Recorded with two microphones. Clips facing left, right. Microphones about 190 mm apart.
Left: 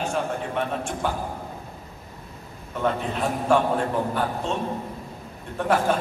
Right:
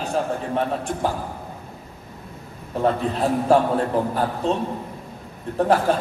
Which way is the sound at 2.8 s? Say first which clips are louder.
Right 4 dB; 35° right (ahead or behind).